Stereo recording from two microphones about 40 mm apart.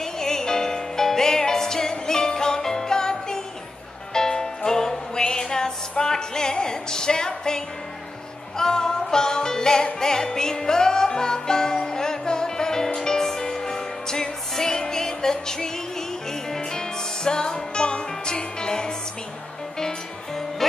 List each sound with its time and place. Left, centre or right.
0.0 s music: centre